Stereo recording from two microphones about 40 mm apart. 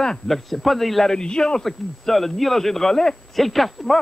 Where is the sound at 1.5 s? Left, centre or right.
Centre.